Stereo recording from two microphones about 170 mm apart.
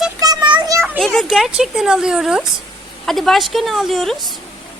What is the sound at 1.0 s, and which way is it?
Speech, centre (ahead or behind).